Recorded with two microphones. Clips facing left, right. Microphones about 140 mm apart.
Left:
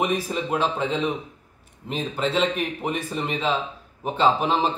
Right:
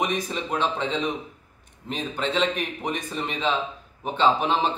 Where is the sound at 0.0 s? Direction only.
5° left (ahead or behind).